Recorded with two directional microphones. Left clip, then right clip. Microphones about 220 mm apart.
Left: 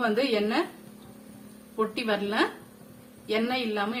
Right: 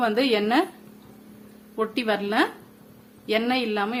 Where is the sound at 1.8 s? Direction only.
35° right (ahead or behind).